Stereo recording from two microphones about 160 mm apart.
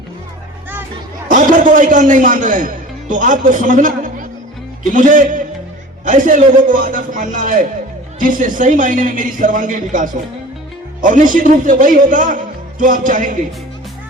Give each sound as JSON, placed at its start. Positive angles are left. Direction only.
{"t": 1.3, "sound": "a man's voice", "side_deg": -55}